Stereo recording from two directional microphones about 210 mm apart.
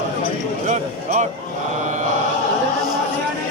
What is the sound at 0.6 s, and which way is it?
Basketball bounce, 35° right (ahead or behind).